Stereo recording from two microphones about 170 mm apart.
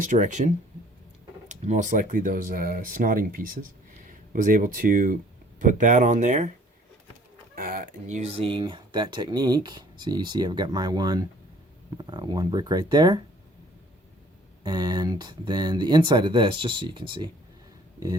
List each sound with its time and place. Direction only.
0.1 s speech: 45° right (ahead or behind)
7.5 s speech: 55° right (ahead or behind); by 13.2 s 25° right (ahead or behind)
14.6 s speech: 25° right (ahead or behind)